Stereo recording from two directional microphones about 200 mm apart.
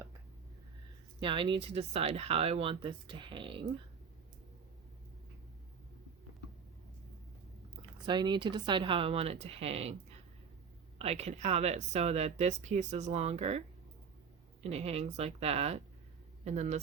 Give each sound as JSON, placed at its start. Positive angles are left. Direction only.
{"t": 1.2, "sound": "speech", "side_deg": -25}
{"t": 7.8, "sound": "speech", "side_deg": -20}
{"t": 10.9, "sound": "speech", "side_deg": -30}
{"t": 14.6, "sound": "speech", "side_deg": -30}